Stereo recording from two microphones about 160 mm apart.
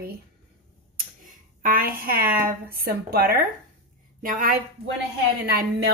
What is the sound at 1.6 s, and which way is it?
A woman's voice, 60° right (ahead or behind).